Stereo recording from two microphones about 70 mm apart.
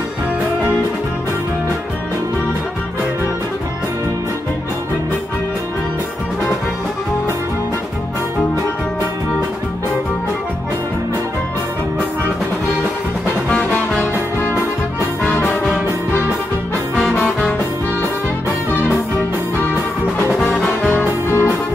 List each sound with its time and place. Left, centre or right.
20.9 s music: left